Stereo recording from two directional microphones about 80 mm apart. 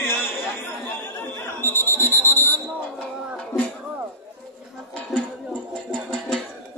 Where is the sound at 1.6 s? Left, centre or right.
Left.